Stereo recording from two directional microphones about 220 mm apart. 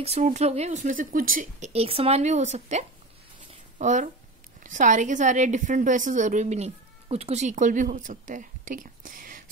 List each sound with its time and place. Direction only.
0.0 s a woman's voice: 30° right (ahead or behind)
3.3 s a sound: 35° right (ahead or behind)
4.6 s a woman's voice: 35° right (ahead or behind)